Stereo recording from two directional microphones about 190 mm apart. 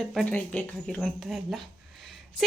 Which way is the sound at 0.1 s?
5° left (ahead or behind).